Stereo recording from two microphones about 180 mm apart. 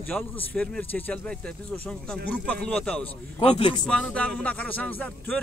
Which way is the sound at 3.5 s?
30° left (ahead or behind).